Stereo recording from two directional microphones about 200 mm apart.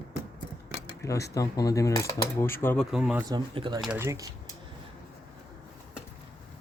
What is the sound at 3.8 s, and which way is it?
Speech, 10° right (ahead or behind).